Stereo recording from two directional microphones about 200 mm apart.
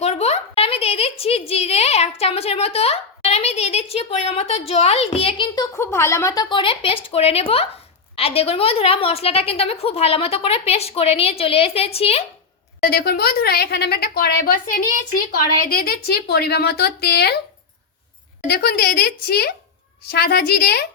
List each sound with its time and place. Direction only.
0.0 s a sound: 30° left (ahead or behind)
1.2 s a woman's voice: 30° left (ahead or behind)
5.7 s a woman's voice: 15° left (ahead or behind); by 12.2 s 30° left (ahead or behind)
12.8 s a woman's voice: 50° left (ahead or behind)
18.4 s a woman's voice: 50° left (ahead or behind)